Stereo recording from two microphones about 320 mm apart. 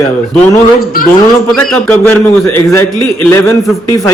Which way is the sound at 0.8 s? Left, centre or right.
Left.